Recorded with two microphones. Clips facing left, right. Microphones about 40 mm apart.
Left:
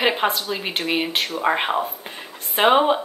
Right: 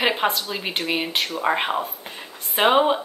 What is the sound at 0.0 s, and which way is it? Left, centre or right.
Speech, centre.